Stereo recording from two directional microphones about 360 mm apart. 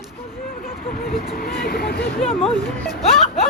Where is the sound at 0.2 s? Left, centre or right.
Left.